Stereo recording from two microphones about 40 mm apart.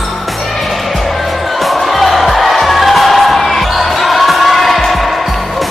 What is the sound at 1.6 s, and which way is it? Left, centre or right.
Music, centre.